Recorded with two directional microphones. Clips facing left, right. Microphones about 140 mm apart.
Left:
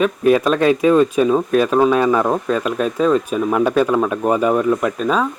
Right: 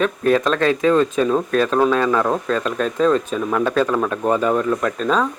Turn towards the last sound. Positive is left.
turn(degrees=10)  # may be behind; listen again after turning